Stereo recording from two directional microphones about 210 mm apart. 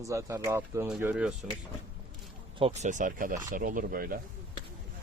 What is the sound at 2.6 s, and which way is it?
Speech, 30° right (ahead or behind).